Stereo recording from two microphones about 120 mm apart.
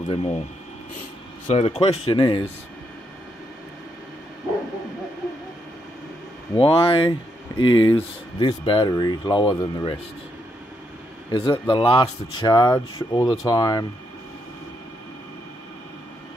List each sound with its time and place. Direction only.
0.1 s speech: 50° left (ahead or behind)
1.5 s speech: 60° left (ahead or behind)
6.6 s speech: 50° left (ahead or behind); by 9.9 s 30° left (ahead or behind)
11.2 s speech: 45° left (ahead or behind)
12.0 s speech: 30° left (ahead or behind)